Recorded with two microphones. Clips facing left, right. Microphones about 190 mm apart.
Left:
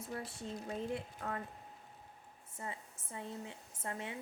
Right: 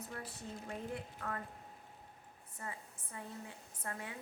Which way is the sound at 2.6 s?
25° left (ahead or behind).